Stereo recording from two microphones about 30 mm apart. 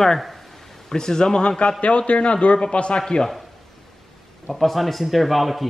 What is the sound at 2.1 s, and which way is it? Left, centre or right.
Speech, left.